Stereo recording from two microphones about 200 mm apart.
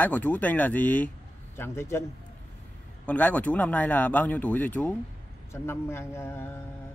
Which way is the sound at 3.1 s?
5° left (ahead or behind).